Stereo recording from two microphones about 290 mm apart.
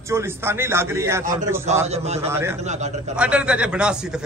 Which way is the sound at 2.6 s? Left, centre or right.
Right.